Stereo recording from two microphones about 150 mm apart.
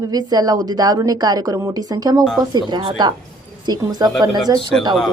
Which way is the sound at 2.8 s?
40° right (ahead or behind).